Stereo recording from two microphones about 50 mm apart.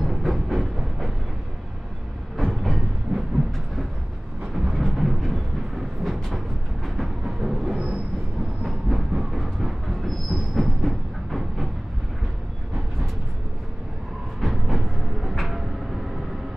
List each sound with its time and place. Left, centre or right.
0.0 s train: centre
2.3 s a sound: centre
3.1 s train: centre
4.6 s a sound: centre
6.2 s vehicle: centre
7.2 s music: centre
9.1 s train: centre
14.4 s vehicle: centre